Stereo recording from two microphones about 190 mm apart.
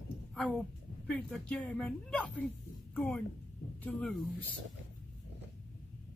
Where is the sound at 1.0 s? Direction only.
Centre (ahead or behind).